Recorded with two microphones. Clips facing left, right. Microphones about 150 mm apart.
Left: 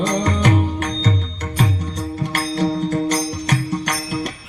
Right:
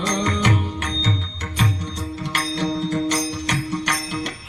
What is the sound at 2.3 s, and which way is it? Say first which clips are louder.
Music: left 3 dB; 40° left (ahead or behind).